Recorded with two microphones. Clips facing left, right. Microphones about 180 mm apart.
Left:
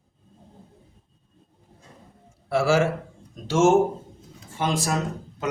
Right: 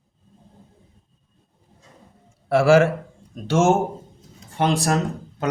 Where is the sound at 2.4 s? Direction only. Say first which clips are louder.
Right 6 dB; 60° right (ahead or behind).